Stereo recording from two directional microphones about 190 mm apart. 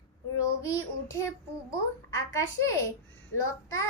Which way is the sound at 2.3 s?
15° left (ahead or behind).